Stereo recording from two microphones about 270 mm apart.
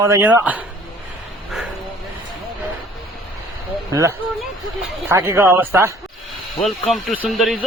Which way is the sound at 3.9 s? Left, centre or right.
Centre.